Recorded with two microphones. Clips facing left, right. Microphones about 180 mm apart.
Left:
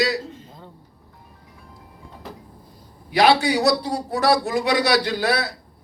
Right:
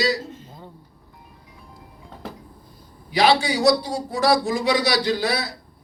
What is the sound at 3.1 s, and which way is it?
A man's voice, 60° left (ahead or behind).